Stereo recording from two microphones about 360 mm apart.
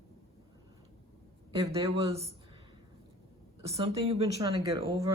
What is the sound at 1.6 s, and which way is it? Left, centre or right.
Speech, centre.